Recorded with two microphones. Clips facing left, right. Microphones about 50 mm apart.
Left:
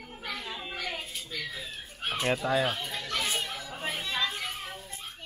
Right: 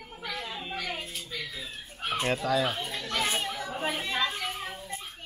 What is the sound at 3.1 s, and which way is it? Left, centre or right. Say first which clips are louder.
Chatter: right 3 dB; right.